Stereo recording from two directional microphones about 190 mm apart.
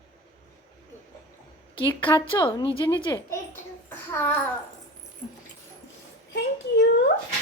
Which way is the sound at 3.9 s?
10° left (ahead or behind).